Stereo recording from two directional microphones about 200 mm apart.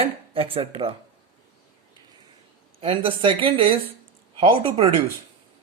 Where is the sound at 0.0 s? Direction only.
30° right (ahead or behind).